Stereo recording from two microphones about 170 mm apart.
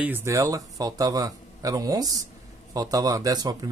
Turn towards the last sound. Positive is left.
turn(degrees=-25)  # may be behind; listen again after turning